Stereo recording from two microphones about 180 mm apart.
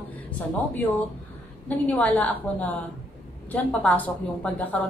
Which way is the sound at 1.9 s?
10° left (ahead or behind).